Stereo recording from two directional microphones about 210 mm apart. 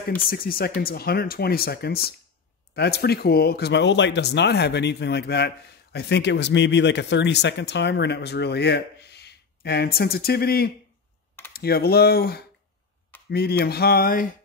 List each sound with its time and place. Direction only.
0.1 s speech: 45° left (ahead or behind)